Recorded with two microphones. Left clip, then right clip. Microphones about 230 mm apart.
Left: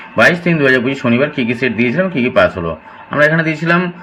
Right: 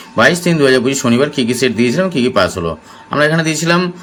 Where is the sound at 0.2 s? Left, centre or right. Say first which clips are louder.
Even; centre.